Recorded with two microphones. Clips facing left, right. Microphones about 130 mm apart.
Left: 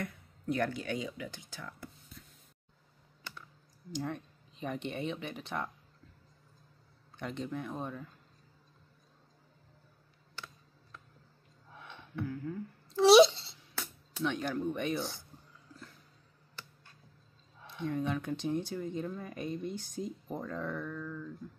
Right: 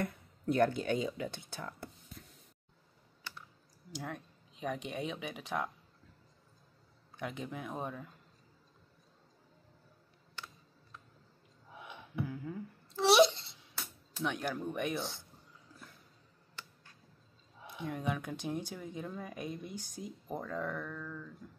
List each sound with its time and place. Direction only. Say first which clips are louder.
0.6 s speech: right 6 dB; 25° right (ahead or behind)
1.3 s speech: right 3 dB; 60° right (ahead or behind)
1.6 s speech: right 2 dB; 35° right (ahead or behind)
3.9 s speech: left 5 dB; 5° right (ahead or behind)
7.2 s speech: left 3 dB; 5° right (ahead or behind)
11.7 s a sound: even; 10° right (ahead or behind)
13.0 s a sound: left 5 dB; 10° left (ahead or behind)
14.2 s speech: left 3 dB; 5° right (ahead or behind)
17.6 s speech: left 3 dB; 10° right (ahead or behind)